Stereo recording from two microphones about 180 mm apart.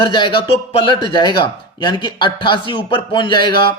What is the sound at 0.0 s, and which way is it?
Speech, 25° left (ahead or behind).